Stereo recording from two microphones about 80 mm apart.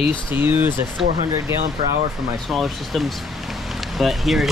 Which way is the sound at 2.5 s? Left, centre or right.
Centre.